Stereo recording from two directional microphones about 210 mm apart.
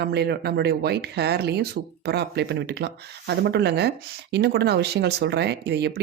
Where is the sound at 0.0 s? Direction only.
50° right (ahead or behind).